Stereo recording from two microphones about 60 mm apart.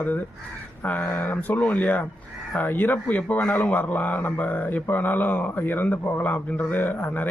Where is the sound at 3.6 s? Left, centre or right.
Left.